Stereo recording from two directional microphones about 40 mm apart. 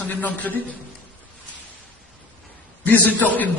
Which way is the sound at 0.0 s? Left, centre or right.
Left.